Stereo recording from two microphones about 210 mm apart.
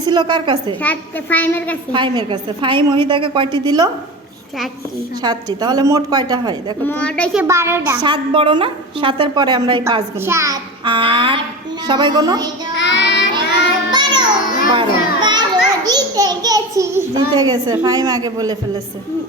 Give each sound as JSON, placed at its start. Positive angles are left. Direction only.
{"t": 0.0, "sound": "a woman's voice", "side_deg": -20}
{"t": 0.8, "sound": "a child's voice", "side_deg": 5}
{"t": 1.9, "sound": "a woman's voice", "side_deg": -20}
{"t": 5.5, "sound": "a woman's voice", "side_deg": -20}
{"t": 6.8, "sound": "a child's voice", "side_deg": 5}
{"t": 7.3, "sound": "a woman's voice", "side_deg": -10}
{"t": 12.7, "sound": "child singing", "side_deg": 55}
{"t": 13.9, "sound": "music", "side_deg": -20}
{"t": 14.7, "sound": "children playing", "side_deg": -20}
{"t": 15.9, "sound": "a child's voice", "side_deg": -20}